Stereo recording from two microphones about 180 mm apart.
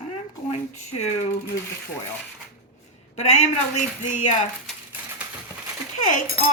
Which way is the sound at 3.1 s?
40° left (ahead or behind).